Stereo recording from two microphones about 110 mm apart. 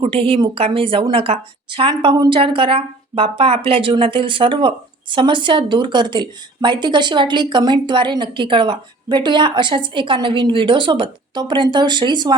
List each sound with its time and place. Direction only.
0.0 s speech: 55° right (ahead or behind)